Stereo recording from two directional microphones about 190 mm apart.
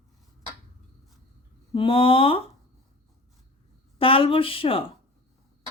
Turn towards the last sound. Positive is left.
turn(degrees=30)  # may be behind; listen again after turning